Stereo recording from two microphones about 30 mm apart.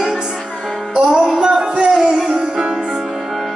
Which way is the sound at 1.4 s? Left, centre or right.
Right.